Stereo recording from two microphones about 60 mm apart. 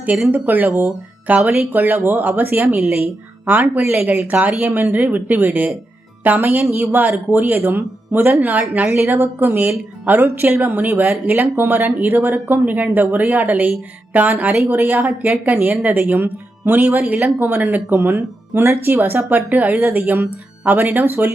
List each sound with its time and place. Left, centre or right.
0.3 s speech: right
4.3 s speech: right
8.9 s speech: right
19.0 s speech: right